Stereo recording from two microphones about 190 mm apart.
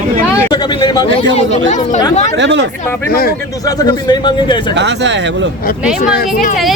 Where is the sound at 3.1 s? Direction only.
50° left (ahead or behind).